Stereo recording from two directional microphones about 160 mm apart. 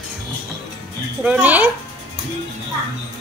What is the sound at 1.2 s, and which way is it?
Speech, 10° right (ahead or behind).